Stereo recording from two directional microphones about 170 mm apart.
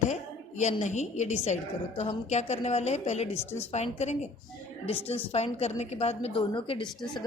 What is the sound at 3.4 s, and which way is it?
Speech, 15° left (ahead or behind).